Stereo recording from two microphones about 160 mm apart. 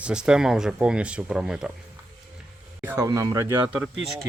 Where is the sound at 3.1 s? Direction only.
20° right (ahead or behind).